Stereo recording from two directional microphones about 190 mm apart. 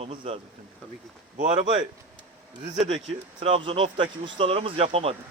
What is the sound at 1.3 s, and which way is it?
Speech, 40° right (ahead or behind).